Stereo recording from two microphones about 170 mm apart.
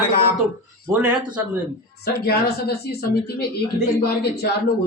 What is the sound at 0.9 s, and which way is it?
Speech, 5° right (ahead or behind).